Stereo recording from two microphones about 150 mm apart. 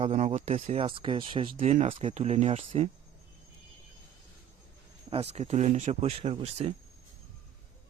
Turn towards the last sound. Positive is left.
turn(degrees=-45)  # may be behind; listen again after turning